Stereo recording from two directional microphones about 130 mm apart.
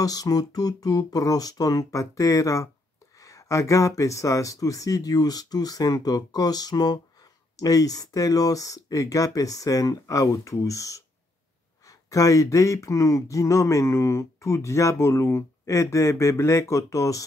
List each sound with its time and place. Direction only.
0.0 s speech: 30° left (ahead or behind)
12.1 s speech: 25° left (ahead or behind)